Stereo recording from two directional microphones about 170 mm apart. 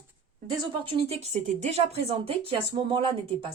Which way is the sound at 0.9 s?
35° right (ahead or behind).